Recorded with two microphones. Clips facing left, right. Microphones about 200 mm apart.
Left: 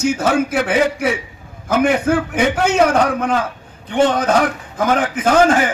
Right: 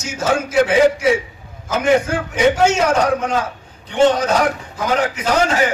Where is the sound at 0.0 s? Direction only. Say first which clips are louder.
Left 4 dB; 60° left (ahead or behind).